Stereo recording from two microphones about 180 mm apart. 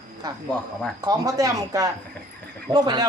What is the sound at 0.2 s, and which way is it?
A man's voice, 20° right (ahead or behind).